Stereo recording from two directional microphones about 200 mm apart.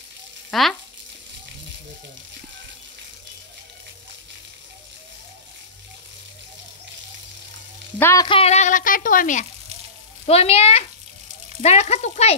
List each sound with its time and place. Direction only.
0.5 s frying: centre (ahead or behind)
8.0 s speech: 15° left (ahead or behind)
8.3 s speech: 30° left (ahead or behind)
10.2 s speech: 30° left (ahead or behind)